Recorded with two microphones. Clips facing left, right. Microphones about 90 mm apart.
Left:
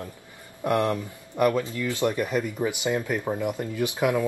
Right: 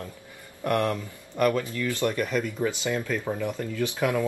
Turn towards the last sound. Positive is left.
turn(degrees=15)  # may be behind; listen again after turning